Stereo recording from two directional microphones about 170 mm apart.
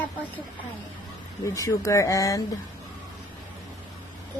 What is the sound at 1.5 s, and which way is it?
Speech, 15° left (ahead or behind).